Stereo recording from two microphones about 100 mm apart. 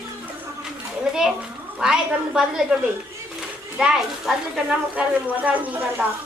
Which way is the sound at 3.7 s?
5° right (ahead or behind).